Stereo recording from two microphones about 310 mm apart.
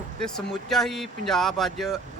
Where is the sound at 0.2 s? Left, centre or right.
Centre.